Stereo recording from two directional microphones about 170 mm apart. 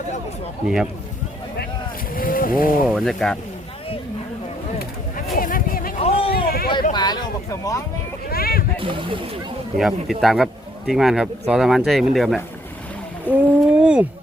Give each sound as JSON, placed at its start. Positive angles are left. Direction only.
{"t": 2.1, "sound": "boat", "side_deg": 55}
{"t": 2.8, "sound": "speech", "side_deg": 0}
{"t": 4.8, "sound": "a sound", "side_deg": 60}
{"t": 6.0, "sound": "vehicle", "side_deg": 35}
{"t": 6.3, "sound": "vehicle", "side_deg": 65}
{"t": 6.9, "sound": "speech", "side_deg": 25}
{"t": 8.3, "sound": "a sound", "side_deg": 65}
{"t": 8.8, "sound": "speech", "side_deg": -30}
{"t": 9.7, "sound": "speech", "side_deg": 0}
{"t": 13.3, "sound": "a sound", "side_deg": 10}
{"t": 13.7, "sound": "speech", "side_deg": -5}